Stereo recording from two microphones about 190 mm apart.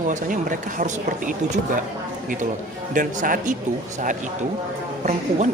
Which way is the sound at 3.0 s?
45° right (ahead or behind).